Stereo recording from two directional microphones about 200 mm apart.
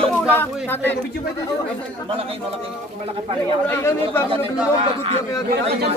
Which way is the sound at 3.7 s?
10° left (ahead or behind).